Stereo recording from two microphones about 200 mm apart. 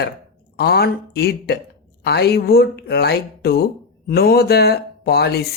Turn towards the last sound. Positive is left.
turn(degrees=55)  # may be behind; listen again after turning